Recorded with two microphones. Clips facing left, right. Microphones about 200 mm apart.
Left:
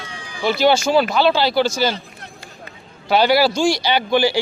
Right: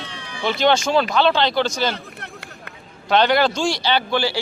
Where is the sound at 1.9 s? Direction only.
65° right (ahead or behind).